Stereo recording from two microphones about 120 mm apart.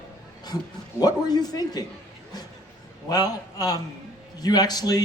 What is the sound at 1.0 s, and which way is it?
Speech, 35° left (ahead or behind).